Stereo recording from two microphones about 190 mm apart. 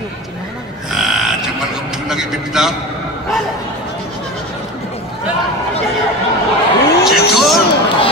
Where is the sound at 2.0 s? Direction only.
5° right (ahead or behind).